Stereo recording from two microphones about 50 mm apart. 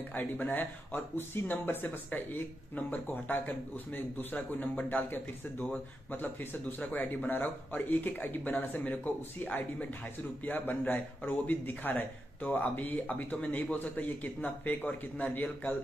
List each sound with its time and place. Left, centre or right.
0.1 s speech: left
6.8 s speech: left